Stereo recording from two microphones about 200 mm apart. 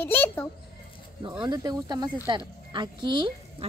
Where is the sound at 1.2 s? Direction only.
25° right (ahead or behind).